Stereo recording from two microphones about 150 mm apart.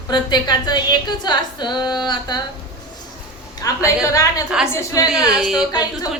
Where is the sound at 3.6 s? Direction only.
25° left (ahead or behind).